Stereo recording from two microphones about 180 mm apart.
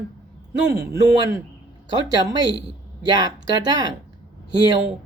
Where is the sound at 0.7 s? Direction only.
15° right (ahead or behind).